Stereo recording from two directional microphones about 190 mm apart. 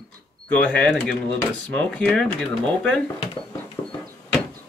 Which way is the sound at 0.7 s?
5° left (ahead or behind).